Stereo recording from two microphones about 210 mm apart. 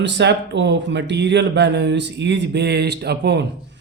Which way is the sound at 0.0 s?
55° right (ahead or behind).